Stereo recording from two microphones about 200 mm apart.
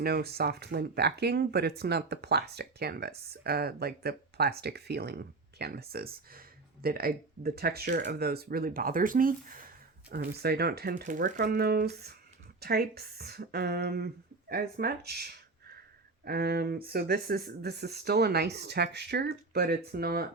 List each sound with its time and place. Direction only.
0.0 s speech: 50° right (ahead or behind)